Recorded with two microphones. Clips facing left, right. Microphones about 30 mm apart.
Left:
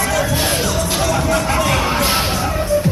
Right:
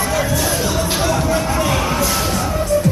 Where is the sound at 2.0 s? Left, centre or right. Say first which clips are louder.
Left 1 dB; left.